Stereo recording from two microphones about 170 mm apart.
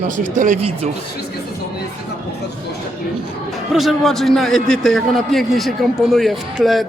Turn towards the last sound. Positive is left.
turn(degrees=0)  # may be behind; listen again after turning